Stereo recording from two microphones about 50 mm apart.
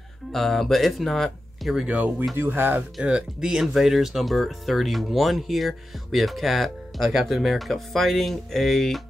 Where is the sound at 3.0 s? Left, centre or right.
Centre.